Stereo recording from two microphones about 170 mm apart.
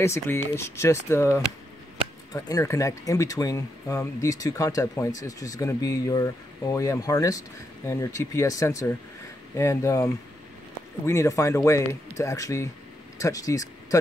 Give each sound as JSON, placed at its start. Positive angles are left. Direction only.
{"t": 0.0, "sound": "speech", "side_deg": 15}